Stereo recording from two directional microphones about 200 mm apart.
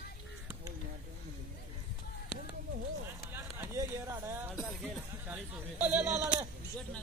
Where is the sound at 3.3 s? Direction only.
15° right (ahead or behind).